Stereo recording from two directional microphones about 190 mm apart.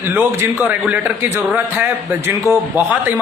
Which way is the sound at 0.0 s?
10° right (ahead or behind).